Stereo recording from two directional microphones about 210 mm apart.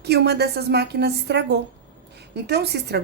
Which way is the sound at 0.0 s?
50° right (ahead or behind).